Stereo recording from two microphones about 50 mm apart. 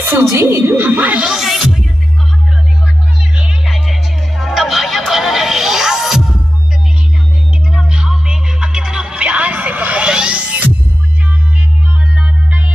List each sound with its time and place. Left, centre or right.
0.0 s a woman's voice: right
1.3 s music: centre
3.6 s music: centre
7.7 s music: centre
9.2 s music: right
12.2 s music: right